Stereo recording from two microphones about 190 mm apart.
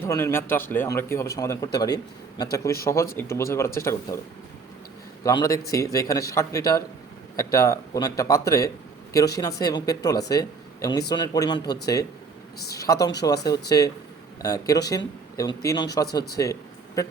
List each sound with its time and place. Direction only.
0.0 s speech: 15° left (ahead or behind)
5.2 s speech: 20° left (ahead or behind)
16.4 s a sound: 15° left (ahead or behind)